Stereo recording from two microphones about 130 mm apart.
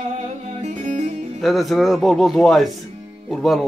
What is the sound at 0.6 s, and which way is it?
Music, 60° right (ahead or behind).